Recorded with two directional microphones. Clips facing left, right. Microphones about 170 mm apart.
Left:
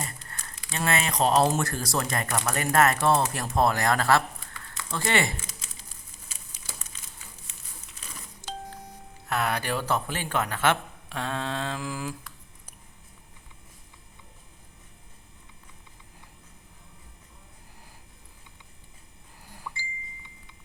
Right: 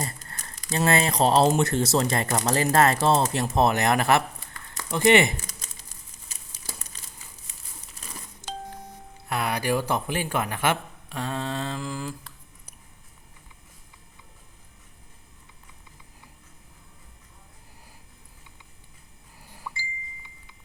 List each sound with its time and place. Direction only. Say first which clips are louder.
0.0 s crumpling: right 4 dB; 40° right (ahead or behind)
0.8 s speech: right 4 dB; 35° right (ahead or behind)
6.5 s crumpling: right 4 dB; 40° right (ahead or behind)
8.4 s doorbell: right 1 dB; 20° right (ahead or behind)
9.3 s speech: right 2 dB; 10° right (ahead or behind)
11.1 s mantra: right 1 dB; centre (ahead or behind)